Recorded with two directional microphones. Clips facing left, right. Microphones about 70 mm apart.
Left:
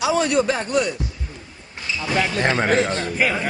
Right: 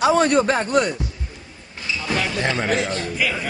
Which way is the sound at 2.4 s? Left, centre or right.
Left.